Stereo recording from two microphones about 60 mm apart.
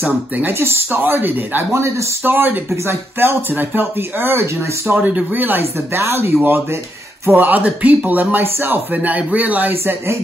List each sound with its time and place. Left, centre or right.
0.5 s speech: right
1.7 s speech: right
2.2 s speech: right
2.7 s speech: right
4.9 s speech: right
5.9 s speech: right